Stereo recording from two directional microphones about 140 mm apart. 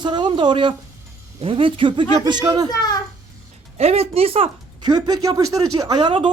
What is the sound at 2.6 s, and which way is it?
Speech, 30° left (ahead or behind).